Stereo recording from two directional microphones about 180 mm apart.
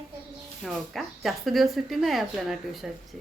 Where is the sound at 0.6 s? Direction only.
Centre (ahead or behind).